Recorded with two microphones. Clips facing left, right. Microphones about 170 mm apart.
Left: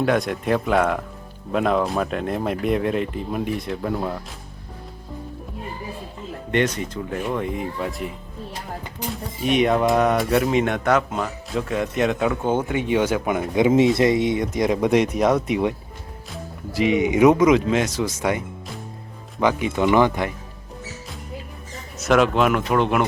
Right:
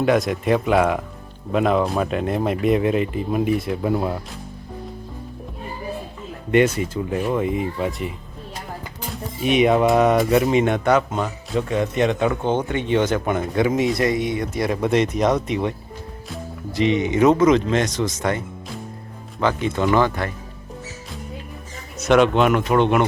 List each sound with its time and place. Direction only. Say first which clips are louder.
0.0 s speech: right 2 dB; centre (ahead or behind)
6.5 s speech: right 5 dB; 10° right (ahead or behind)
9.4 s speech: right 2 dB; centre (ahead or behind)
13.6 s speech: left 4 dB; 25° left (ahead or behind)
16.7 s speech: even; 10° left (ahead or behind)
21.9 s speech: right 2 dB; centre (ahead or behind)